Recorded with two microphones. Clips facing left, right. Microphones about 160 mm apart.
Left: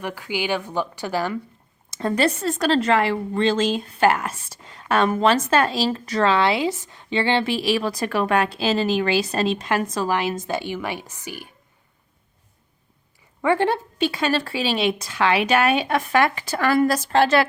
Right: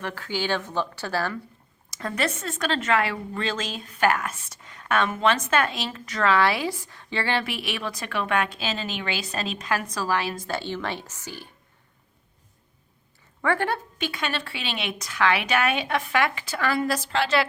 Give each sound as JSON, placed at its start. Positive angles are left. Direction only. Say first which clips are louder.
{"t": 0.0, "sound": "speech", "louder": "left 2 dB", "side_deg": 10}
{"t": 1.9, "sound": "a woman's voice", "louder": "left 7 dB", "side_deg": 30}
{"t": 13.4, "sound": "a woman's voice", "louder": "left 5 dB", "side_deg": 20}